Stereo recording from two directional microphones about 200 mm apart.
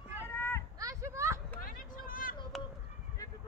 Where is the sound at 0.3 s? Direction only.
10° left (ahead or behind).